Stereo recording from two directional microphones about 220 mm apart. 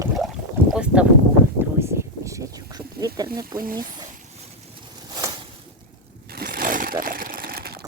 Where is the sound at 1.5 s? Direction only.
10° right (ahead or behind).